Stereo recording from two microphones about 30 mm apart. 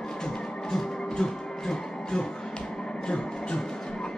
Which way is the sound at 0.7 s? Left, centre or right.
Left.